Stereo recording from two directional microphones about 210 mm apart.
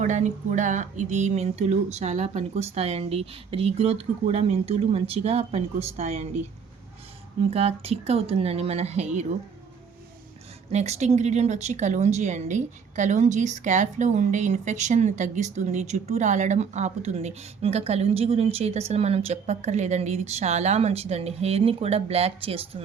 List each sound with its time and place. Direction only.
0.0 s a woman's voice: 35° right (ahead or behind)
7.5 s a woman's voice: 30° right (ahead or behind)
10.7 s a woman's voice: 30° right (ahead or behind)